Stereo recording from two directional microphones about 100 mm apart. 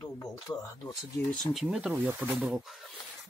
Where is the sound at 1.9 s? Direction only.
20° right (ahead or behind).